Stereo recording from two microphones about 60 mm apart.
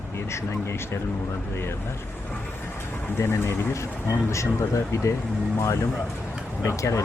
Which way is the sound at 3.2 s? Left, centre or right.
Left.